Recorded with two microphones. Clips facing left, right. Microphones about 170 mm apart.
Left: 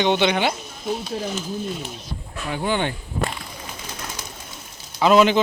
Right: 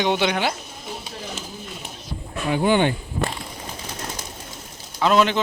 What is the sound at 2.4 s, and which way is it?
Speech, 15° right (ahead or behind).